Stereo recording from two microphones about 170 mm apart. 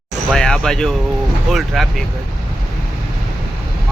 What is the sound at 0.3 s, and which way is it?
Speech, 5° left (ahead or behind).